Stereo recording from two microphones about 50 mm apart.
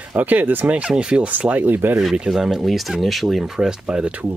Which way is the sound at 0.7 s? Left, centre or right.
Right.